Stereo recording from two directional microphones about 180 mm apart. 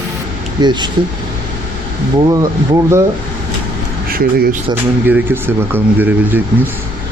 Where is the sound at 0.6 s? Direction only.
25° right (ahead or behind).